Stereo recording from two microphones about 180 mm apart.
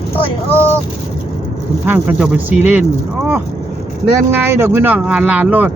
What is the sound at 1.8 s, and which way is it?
Speech, 10° right (ahead or behind).